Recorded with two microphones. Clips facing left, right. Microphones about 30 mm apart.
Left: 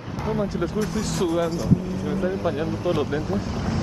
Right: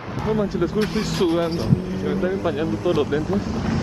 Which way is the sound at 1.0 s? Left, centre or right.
Right.